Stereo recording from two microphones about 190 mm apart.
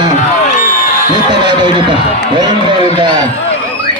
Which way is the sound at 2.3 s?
25° right (ahead or behind).